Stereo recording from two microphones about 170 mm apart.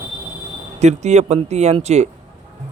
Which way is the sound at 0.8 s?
40° right (ahead or behind).